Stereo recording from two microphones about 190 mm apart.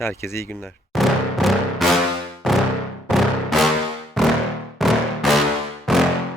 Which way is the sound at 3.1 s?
Centre (ahead or behind).